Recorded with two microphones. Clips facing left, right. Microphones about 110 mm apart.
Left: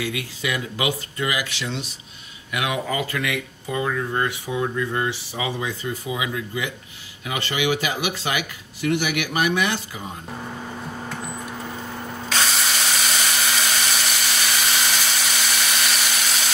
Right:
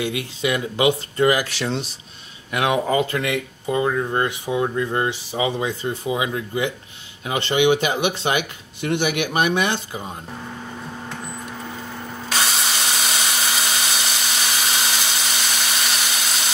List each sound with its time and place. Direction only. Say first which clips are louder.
0.0 s speech: right 4 dB; 25° right (ahead or behind)
1.2 s speech: right 8 dB; 40° right (ahead or behind)
12.3 s drill: right 1 dB; 5° right (ahead or behind)
15.6 s a sound: even; 5° right (ahead or behind)